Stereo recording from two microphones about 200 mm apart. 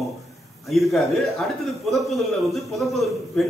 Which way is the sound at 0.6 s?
Centre (ahead or behind).